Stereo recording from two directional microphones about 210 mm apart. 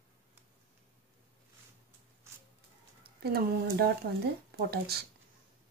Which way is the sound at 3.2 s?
45° right (ahead or behind).